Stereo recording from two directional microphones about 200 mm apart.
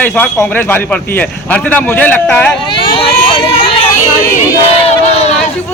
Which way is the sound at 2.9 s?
25° left (ahead or behind).